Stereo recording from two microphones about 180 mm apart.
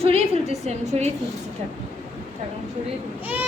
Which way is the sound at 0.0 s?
35° right (ahead or behind).